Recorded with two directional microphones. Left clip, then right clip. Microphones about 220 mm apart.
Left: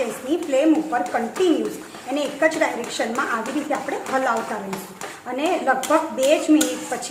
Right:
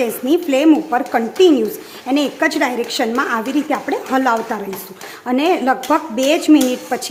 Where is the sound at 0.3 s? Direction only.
45° right (ahead or behind).